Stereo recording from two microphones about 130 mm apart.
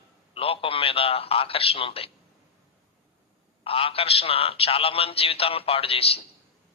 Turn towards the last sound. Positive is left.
turn(degrees=50)  # may be behind; listen again after turning